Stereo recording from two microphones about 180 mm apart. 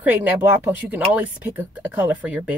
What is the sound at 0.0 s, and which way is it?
Speech, 10° right (ahead or behind).